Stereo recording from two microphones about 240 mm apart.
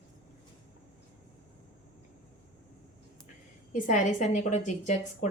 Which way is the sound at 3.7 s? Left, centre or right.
Left.